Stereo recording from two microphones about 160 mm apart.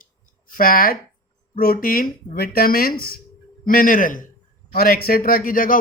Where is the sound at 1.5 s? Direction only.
65° left (ahead or behind).